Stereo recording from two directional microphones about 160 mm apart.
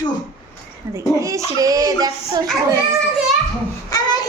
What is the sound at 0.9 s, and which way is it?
A woman's voice, 20° right (ahead or behind).